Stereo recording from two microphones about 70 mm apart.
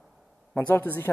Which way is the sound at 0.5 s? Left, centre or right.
Left.